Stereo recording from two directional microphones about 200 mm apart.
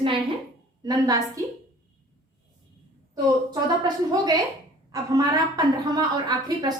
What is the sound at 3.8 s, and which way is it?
A woman's voice, 20° right (ahead or behind).